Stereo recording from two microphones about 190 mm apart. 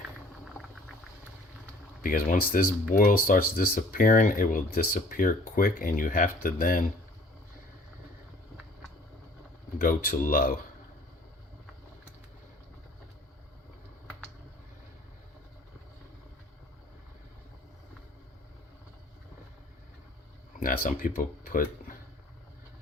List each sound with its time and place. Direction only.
2.0 s speech: 45° left (ahead or behind)
9.7 s speech: 50° left (ahead or behind)
20.6 s speech: 45° left (ahead or behind)